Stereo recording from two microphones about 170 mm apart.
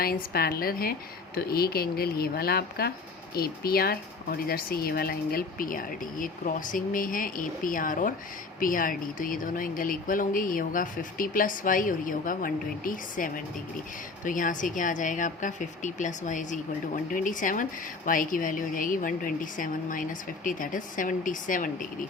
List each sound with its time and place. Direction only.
0.0 s a woman's voice: 60° left (ahead or behind)